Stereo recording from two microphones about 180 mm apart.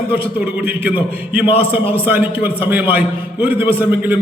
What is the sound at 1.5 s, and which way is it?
Speech, 30° left (ahead or behind).